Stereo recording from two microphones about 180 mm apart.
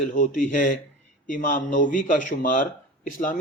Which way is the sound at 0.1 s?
45° left (ahead or behind).